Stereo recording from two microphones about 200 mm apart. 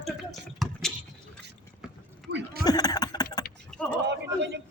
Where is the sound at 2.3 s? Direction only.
60° right (ahead or behind).